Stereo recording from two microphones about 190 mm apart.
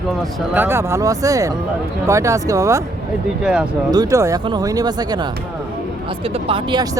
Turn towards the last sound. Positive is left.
turn(degrees=-25)  # may be behind; listen again after turning